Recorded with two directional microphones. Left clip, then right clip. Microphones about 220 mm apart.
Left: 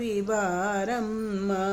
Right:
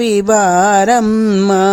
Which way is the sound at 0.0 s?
45° right (ahead or behind).